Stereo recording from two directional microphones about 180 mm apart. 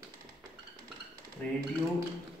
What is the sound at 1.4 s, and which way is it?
Speech, 5° left (ahead or behind).